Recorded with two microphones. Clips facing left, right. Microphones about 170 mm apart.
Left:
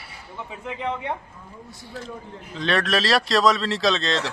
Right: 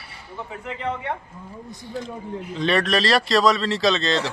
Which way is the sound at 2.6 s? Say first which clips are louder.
Right 2 dB; centre (ahead or behind).